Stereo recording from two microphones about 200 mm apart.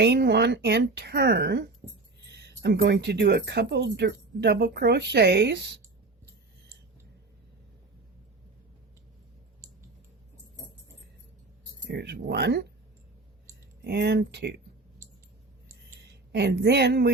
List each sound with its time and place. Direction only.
0.0 s speech: 55° right (ahead or behind)
11.9 s speech: 55° right (ahead or behind)
13.8 s speech: 55° right (ahead or behind)
16.3 s speech: 60° right (ahead or behind)